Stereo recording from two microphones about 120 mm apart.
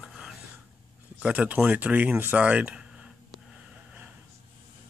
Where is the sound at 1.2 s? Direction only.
10° right (ahead or behind).